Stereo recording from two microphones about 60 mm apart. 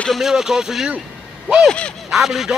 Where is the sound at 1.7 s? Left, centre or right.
Centre.